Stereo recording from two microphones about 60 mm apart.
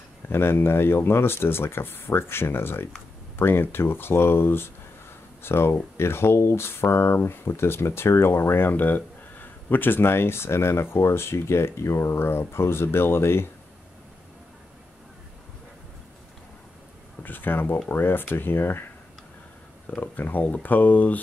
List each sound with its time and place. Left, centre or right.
0.3 s speech: left
17.2 s speech: left
19.9 s speech: left